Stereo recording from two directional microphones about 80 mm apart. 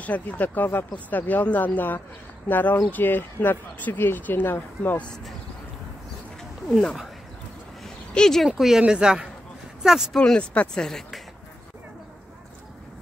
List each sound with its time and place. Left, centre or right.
0.0 s speech: centre
8.1 s speech: centre
8.5 s speech: centre
10.1 s speech: centre